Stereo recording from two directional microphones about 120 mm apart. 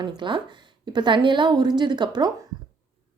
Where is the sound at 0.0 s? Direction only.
40° right (ahead or behind).